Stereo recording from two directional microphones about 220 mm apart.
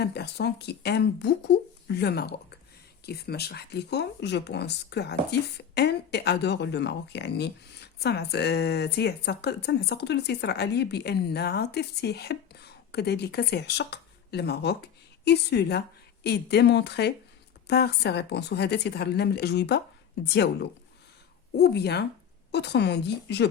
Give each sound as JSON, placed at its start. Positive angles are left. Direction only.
{"t": 0.0, "sound": "speech", "side_deg": 50}